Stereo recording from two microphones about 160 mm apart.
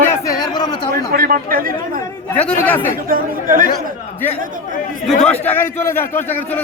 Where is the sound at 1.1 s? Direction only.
65° right (ahead or behind).